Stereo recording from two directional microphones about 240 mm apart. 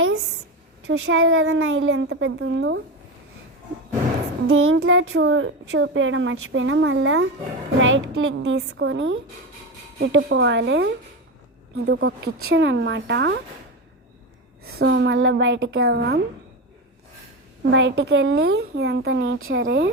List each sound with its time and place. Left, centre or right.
0.9 s a child's voice: right
4.4 s a child's voice: right
14.8 s a child's voice: right
17.7 s a child's voice: right